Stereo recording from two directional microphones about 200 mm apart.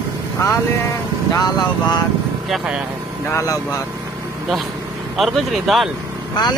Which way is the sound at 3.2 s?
15° left (ahead or behind).